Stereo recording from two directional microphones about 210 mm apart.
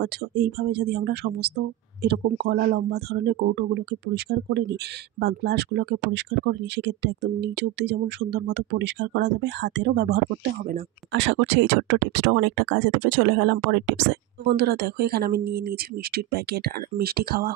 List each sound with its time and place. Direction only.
0.0 s speech: 50° right (ahead or behind)